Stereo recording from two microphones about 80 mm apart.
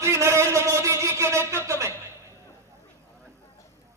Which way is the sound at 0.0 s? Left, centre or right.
Right.